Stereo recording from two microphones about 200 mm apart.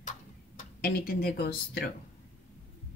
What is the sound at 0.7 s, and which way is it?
A woman's voice, 50° left (ahead or behind).